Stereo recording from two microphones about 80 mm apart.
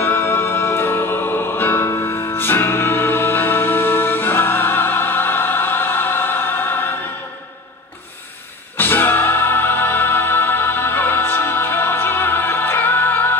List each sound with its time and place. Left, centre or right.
0.0 s music: left
8.7 s music: left